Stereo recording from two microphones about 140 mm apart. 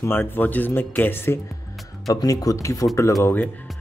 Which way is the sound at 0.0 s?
15° left (ahead or behind).